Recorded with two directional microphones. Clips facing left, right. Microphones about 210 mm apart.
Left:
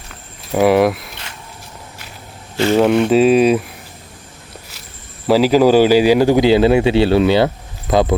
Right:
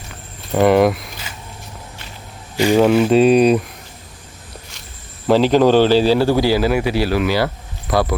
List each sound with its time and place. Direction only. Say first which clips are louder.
0.5 s speech: even; centre (ahead or behind)
2.7 s speech: even; centre (ahead or behind)
5.3 s a man's voice: left 1 dB; 5° left (ahead or behind); by 8.1 s 20° left (ahead or behind)